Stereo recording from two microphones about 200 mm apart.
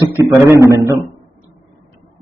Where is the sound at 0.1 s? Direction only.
15° right (ahead or behind).